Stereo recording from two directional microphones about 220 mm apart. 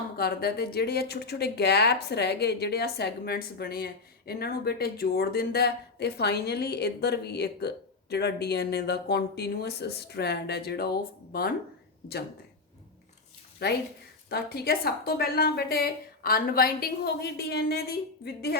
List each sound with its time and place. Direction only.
0.2 s speech: 45° left (ahead or behind)
13.6 s speech: 45° left (ahead or behind)